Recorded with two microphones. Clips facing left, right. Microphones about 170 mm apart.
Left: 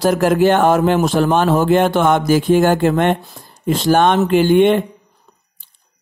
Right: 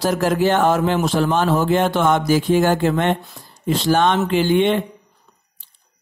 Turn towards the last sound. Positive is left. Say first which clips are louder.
# left 5 dB
turn(degrees=50)  # may be behind; listen again after turning